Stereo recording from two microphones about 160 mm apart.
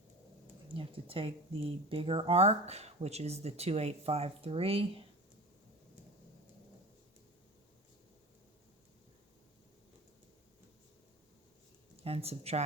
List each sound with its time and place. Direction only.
0.7 s speech: 35° right (ahead or behind)
12.0 s speech: 40° right (ahead or behind)